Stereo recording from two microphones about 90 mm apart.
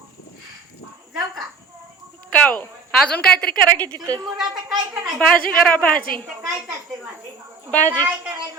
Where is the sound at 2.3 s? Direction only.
15° left (ahead or behind).